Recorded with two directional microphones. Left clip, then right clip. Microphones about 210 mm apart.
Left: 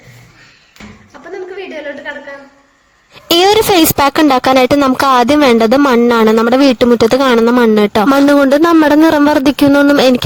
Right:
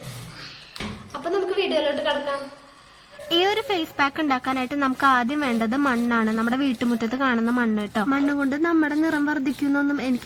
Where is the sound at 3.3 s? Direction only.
50° left (ahead or behind).